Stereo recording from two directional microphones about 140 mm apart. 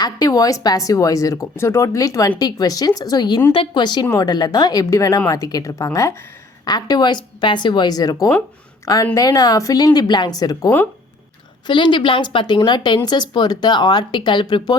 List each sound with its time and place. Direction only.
0.0 s speech: 25° left (ahead or behind)